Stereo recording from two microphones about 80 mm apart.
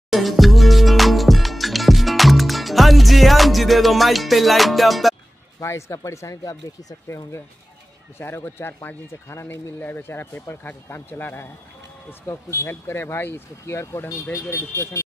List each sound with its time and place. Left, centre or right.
0.1 s music: centre
5.6 s speech: left
8.2 s speech: left